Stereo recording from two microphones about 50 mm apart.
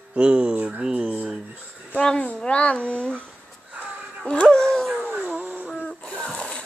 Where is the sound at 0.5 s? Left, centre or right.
Right.